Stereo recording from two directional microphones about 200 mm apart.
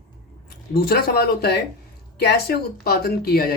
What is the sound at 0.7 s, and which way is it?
Speech, 50° left (ahead or behind).